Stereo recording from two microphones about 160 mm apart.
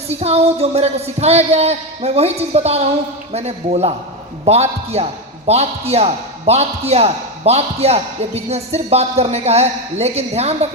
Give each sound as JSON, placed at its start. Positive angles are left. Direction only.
{"t": 0.1, "sound": "a man's voice", "side_deg": -40}